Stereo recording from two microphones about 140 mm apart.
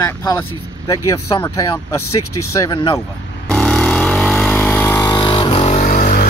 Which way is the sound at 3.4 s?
5° left (ahead or behind).